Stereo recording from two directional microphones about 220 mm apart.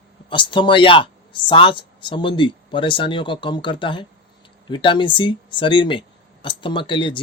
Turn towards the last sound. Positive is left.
turn(degrees=20)  # may be behind; listen again after turning